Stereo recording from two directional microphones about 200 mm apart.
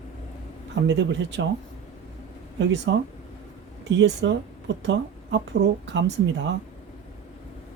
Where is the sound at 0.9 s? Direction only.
60° right (ahead or behind).